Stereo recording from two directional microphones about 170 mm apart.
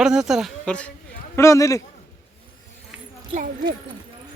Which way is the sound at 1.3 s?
15° left (ahead or behind).